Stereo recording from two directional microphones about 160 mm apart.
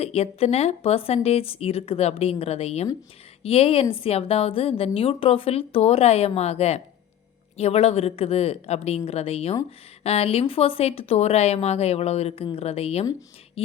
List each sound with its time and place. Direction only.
0.0 s speech: 40° left (ahead or behind)